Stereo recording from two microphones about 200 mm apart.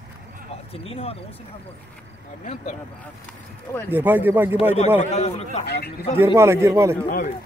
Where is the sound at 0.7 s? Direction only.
30° left (ahead or behind).